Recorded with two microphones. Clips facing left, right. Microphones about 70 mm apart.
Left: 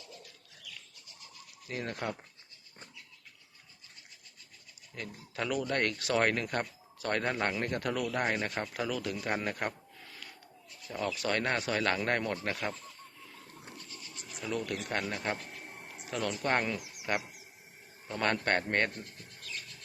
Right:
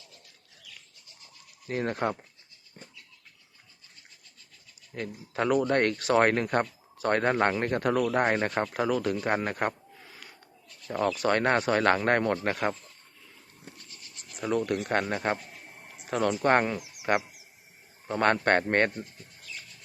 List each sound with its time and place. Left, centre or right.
1.6 s speech: right
4.9 s speech: right
10.8 s speech: right
14.4 s a man's voice: right